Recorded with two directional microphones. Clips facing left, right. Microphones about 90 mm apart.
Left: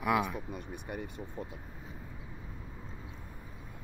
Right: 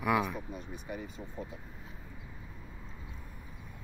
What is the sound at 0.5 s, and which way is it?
Speech, 60° left (ahead or behind).